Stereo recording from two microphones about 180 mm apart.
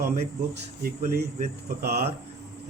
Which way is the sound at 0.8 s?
55° right (ahead or behind).